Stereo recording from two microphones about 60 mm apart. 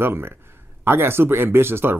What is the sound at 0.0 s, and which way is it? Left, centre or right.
Speech, right.